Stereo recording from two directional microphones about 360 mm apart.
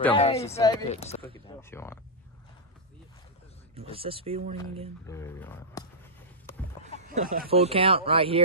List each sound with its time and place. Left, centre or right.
0.0 s speech: centre
1.6 s speech: centre
3.7 s speech: centre
5.0 s speech: centre
6.5 s a sound: centre
7.0 s speech: right